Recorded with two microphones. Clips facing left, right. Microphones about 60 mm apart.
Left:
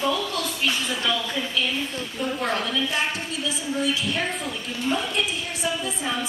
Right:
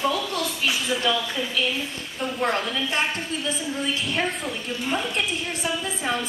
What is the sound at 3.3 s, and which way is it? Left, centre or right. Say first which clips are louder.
Speech: right 1 dB; right.